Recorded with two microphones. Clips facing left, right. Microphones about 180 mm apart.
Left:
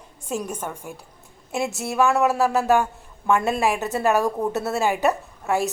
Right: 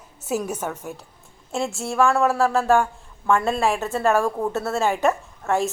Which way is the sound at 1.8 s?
20° left (ahead or behind).